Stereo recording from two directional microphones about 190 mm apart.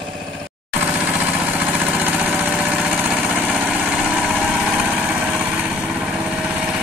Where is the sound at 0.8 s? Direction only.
5° right (ahead or behind).